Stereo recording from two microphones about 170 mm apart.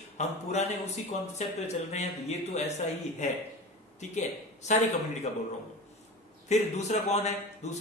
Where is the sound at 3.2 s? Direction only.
45° left (ahead or behind).